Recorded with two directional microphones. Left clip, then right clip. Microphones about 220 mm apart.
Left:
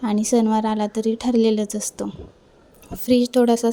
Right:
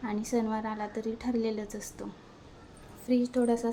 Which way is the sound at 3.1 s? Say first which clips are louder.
Left 11 dB; 40° left (ahead or behind).